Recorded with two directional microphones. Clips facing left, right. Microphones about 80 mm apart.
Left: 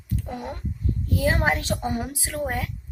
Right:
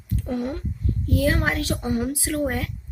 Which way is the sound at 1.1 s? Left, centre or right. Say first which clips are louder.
Right 1 dB; left.